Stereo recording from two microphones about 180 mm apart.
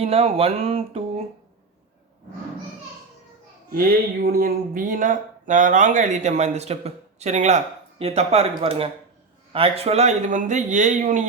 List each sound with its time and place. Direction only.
0.0 s speech: 35° right (ahead or behind)
3.7 s speech: 55° right (ahead or behind)